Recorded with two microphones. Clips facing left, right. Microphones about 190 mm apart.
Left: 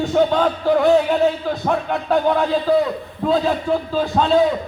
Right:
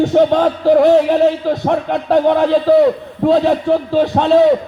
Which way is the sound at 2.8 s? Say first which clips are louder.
Right 9 dB; 70° right (ahead or behind).